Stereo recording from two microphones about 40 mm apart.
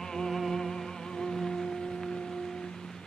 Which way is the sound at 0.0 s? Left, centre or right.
Centre.